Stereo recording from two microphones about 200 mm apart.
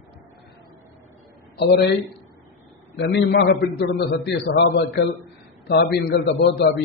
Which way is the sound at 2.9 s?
60° left (ahead or behind).